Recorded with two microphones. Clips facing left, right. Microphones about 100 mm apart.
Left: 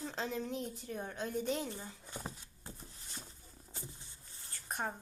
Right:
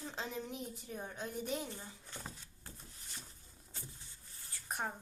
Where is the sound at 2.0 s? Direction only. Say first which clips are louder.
Left 4 dB; 15° left (ahead or behind).